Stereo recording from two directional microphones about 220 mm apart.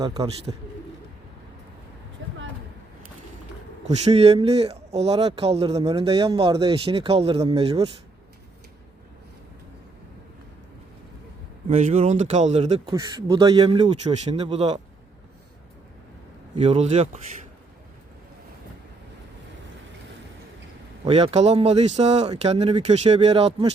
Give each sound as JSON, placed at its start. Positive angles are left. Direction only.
{"t": 0.0, "sound": "speech", "side_deg": -15}
{"t": 3.8, "sound": "speech", "side_deg": -30}
{"t": 11.7, "sound": "speech", "side_deg": -30}
{"t": 12.9, "sound": "speech", "side_deg": -15}
{"t": 16.6, "sound": "speech", "side_deg": -25}
{"t": 21.0, "sound": "speech", "side_deg": -25}